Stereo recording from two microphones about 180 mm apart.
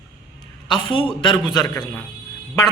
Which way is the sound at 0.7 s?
30° left (ahead or behind).